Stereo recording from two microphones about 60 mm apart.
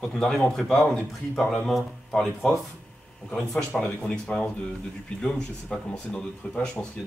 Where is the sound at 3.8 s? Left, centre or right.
Centre.